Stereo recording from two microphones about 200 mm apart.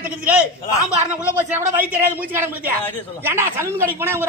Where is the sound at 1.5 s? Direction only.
10° right (ahead or behind).